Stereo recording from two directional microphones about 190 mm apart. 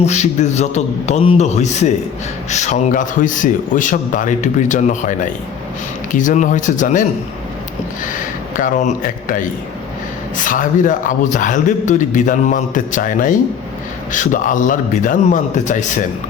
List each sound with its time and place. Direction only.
0.0 s a man's voice: 35° left (ahead or behind)
8.5 s a man's voice: 45° left (ahead or behind)